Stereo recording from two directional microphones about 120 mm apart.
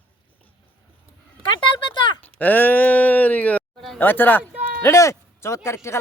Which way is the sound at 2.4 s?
15° left (ahead or behind).